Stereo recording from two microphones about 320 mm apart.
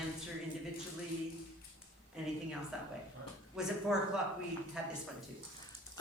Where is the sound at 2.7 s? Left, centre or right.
Centre.